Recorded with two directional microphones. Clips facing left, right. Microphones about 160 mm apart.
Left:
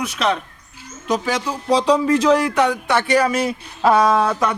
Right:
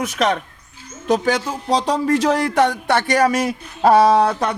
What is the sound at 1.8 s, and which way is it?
A man's voice, 45° right (ahead or behind).